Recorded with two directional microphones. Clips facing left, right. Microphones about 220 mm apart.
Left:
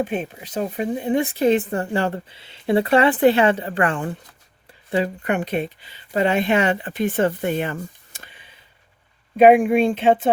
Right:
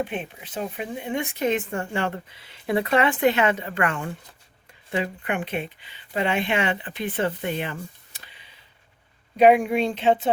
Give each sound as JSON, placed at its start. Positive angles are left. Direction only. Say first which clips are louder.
{"t": 0.0, "sound": "speech", "louder": "left 5 dB", "side_deg": 40}
{"t": 9.4, "sound": "speech", "louder": "left 4 dB", "side_deg": 50}